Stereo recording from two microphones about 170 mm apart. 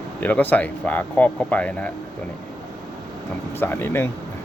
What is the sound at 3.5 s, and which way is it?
Speech, 15° left (ahead or behind).